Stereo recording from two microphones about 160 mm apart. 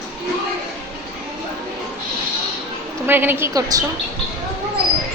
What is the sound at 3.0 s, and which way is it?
Speech, 15° right (ahead or behind).